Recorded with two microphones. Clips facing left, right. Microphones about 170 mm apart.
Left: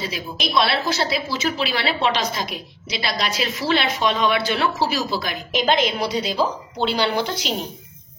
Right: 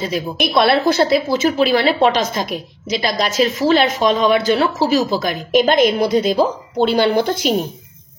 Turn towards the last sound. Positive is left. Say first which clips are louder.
# right 8 dB
turn(degrees=-50)  # may be behind; listen again after turning